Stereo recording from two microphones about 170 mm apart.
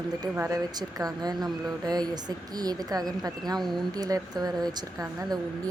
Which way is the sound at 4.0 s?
20° right (ahead or behind).